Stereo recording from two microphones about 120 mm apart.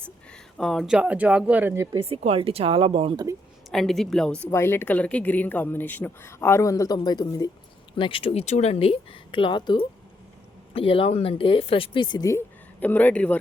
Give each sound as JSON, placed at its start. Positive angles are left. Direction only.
{"t": 0.0, "sound": "a sound", "side_deg": 5}
{"t": 0.9, "sound": "speech", "side_deg": -10}
{"t": 2.0, "sound": "speech", "side_deg": -55}
{"t": 3.7, "sound": "a woman's voice", "side_deg": 5}
{"t": 4.5, "sound": "speech", "side_deg": 20}
{"t": 7.9, "sound": "speech", "side_deg": 45}
{"t": 10.8, "sound": "speech", "side_deg": 50}
{"t": 12.8, "sound": "a man's voice", "side_deg": 15}